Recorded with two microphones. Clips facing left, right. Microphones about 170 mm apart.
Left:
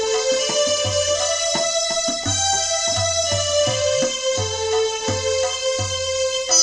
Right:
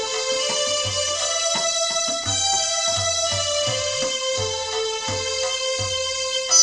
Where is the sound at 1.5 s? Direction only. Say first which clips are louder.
Left 4 dB; 45° left (ahead or behind).